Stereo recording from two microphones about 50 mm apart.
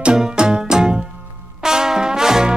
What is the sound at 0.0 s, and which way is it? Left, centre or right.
Music, centre.